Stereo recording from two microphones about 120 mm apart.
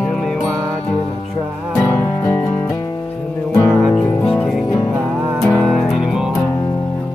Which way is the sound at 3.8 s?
10° left (ahead or behind).